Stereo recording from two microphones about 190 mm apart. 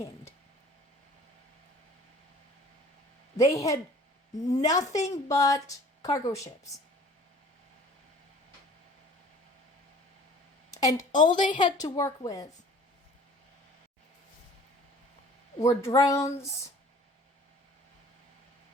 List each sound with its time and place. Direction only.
3.3 s a woman's voice: 15° left (ahead or behind)
10.7 s a sound: 20° left (ahead or behind)
11.3 s a woman's voice: 25° left (ahead or behind)
15.6 s speech: 15° left (ahead or behind)